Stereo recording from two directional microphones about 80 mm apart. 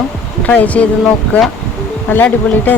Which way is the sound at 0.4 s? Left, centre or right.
Centre.